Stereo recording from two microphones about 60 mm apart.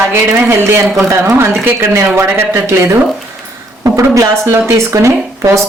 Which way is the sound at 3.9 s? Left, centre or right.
Right.